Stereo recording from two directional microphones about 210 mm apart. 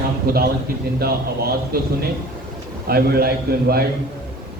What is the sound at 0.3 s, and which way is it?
A man's voice, 45° right (ahead or behind).